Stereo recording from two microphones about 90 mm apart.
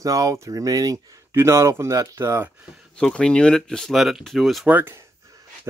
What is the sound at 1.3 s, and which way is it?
Speech, 30° right (ahead or behind).